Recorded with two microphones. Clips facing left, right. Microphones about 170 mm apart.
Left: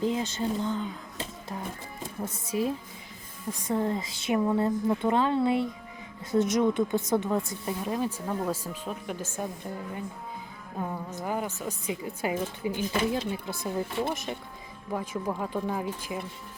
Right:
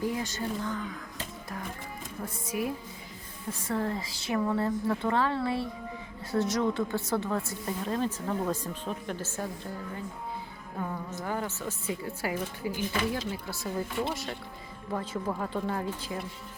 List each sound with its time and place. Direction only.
0.0 s a woman's voice: 25° left (ahead or behind)
10.8 s a woman's voice: 15° left (ahead or behind)